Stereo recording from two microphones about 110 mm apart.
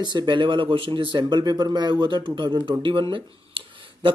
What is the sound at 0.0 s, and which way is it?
A man's voice, 45° right (ahead or behind).